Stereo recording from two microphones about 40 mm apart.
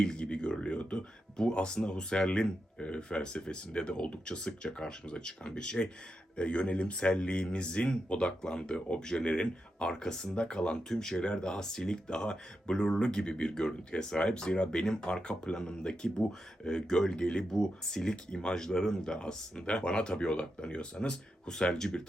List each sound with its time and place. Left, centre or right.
0.0 s a sound: left
0.6 s speech: left
10.8 s speech: centre
21.1 s speech: centre